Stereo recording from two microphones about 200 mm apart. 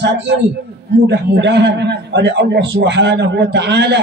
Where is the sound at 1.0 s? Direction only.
60° right (ahead or behind).